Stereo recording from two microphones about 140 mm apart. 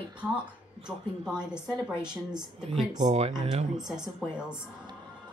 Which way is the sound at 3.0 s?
55° right (ahead or behind).